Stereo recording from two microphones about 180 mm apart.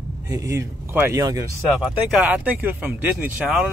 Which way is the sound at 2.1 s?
10° right (ahead or behind).